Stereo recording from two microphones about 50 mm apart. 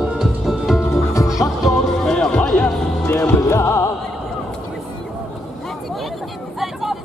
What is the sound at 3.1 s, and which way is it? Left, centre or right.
Music, left.